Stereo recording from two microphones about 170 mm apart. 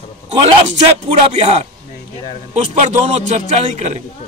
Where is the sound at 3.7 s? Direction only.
40° right (ahead or behind).